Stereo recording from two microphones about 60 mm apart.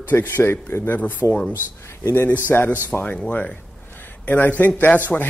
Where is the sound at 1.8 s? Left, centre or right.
Left.